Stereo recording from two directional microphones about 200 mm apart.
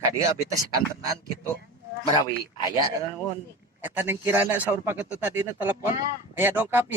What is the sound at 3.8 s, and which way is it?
Speech, 10° right (ahead or behind).